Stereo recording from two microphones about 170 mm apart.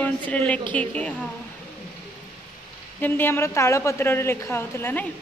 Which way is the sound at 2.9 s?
10° left (ahead or behind).